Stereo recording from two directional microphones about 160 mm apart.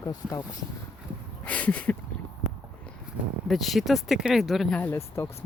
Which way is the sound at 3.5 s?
Centre (ahead or behind).